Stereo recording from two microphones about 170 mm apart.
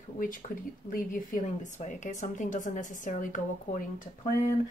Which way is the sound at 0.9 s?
50° left (ahead or behind).